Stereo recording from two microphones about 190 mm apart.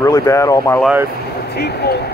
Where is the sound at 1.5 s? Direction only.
55° left (ahead or behind).